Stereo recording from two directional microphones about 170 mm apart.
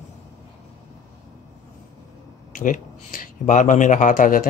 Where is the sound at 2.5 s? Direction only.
50° left (ahead or behind).